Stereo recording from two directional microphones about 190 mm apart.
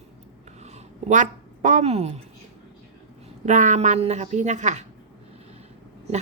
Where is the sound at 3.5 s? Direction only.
40° right (ahead or behind).